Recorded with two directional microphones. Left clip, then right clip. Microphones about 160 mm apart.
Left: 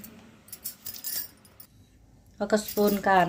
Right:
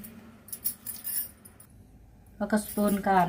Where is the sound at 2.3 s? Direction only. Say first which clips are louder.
Left 4 dB; 60° left (ahead or behind).